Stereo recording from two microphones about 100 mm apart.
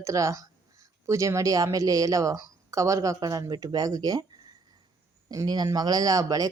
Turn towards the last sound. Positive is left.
turn(degrees=-35)  # may be behind; listen again after turning